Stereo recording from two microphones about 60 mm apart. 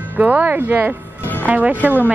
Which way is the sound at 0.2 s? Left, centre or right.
Right.